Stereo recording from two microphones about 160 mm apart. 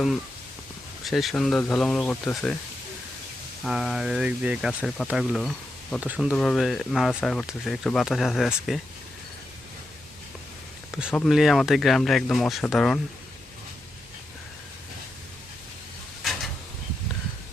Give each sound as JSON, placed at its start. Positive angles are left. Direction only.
{"t": 1.0, "sound": "speech", "side_deg": 0}
{"t": 3.6, "sound": "speech", "side_deg": 0}
{"t": 11.1, "sound": "speech", "side_deg": 5}
{"t": 16.2, "sound": "a sound", "side_deg": 0}